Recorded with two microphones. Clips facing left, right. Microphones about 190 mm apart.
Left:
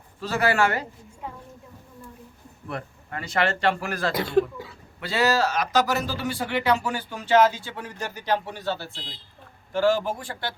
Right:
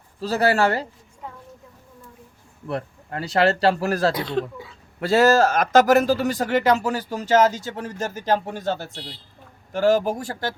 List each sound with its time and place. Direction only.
0.2 s speech: 35° right (ahead or behind)
2.6 s speech: 35° right (ahead or behind)
4.1 s speech: 10° left (ahead or behind)
4.9 s speech: 45° right (ahead or behind)